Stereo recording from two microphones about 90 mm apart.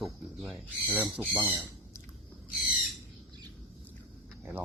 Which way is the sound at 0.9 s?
15° right (ahead or behind).